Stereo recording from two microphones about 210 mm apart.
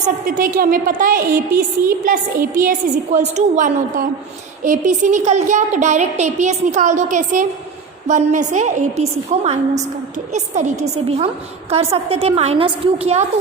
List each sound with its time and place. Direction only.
0.3 s a woman's voice: 40° right (ahead or behind)